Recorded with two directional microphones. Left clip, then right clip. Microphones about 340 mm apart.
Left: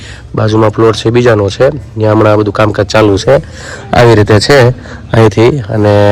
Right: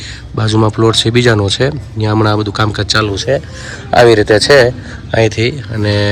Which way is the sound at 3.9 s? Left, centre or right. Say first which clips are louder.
Left 1 dB; left.